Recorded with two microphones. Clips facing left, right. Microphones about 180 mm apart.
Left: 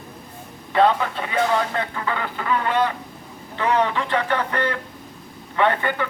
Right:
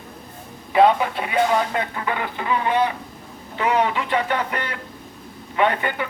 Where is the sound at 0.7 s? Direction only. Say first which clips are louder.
Right 2 dB; 10° right (ahead or behind).